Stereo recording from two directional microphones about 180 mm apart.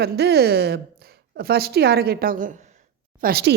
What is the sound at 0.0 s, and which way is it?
A woman's voice, 65° right (ahead or behind).